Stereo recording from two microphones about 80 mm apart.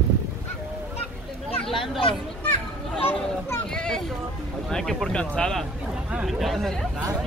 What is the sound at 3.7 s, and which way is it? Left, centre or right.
Speech, centre.